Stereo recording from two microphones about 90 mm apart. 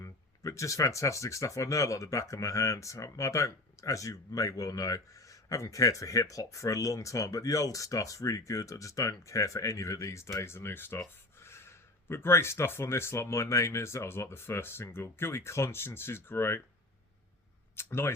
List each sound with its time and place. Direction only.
0.0 s speech: 35° left (ahead or behind)
17.7 s speech: 25° left (ahead or behind)